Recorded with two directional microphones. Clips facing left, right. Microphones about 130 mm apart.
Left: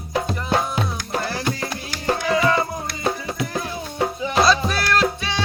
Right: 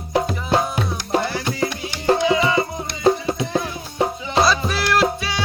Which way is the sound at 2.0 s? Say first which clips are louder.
Right 2 dB; 25° right (ahead or behind).